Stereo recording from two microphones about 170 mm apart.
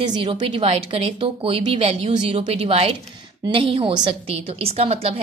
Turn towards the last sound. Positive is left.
turn(degrees=-35)  # may be behind; listen again after turning